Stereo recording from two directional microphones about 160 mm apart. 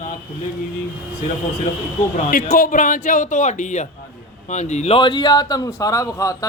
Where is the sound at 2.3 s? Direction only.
60° left (ahead or behind); by 6.5 s 20° left (ahead or behind).